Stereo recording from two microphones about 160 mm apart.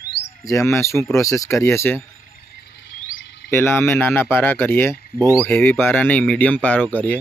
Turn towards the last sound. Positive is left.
turn(degrees=10)  # may be behind; listen again after turning